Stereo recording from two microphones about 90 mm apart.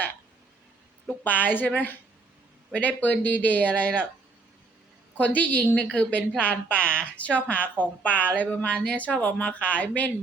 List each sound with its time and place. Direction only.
1.0 s a woman's voice: 15° left (ahead or behind)
5.1 s a woman's voice: 15° left (ahead or behind)